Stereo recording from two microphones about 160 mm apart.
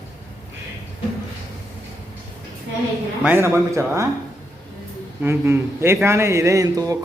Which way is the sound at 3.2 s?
15° right (ahead or behind).